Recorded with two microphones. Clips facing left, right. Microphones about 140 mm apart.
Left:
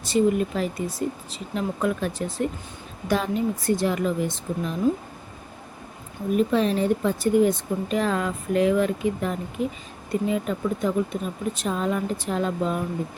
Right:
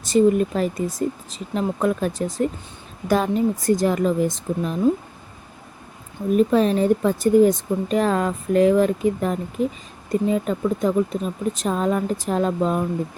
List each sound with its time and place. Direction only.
0.1 s speech: 45° right (ahead or behind)
6.3 s speech: 40° right (ahead or behind)